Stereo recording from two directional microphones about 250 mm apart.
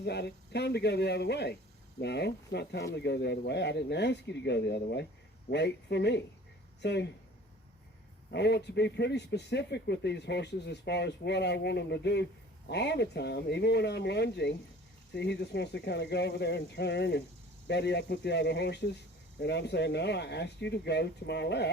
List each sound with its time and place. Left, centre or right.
0.0 s speech: left
8.3 s speech: left